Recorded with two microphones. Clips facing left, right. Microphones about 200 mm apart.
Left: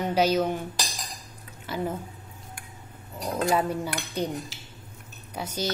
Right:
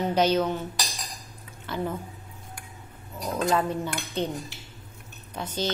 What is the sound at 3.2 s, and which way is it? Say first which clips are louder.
Speech: even; 10° left (ahead or behind).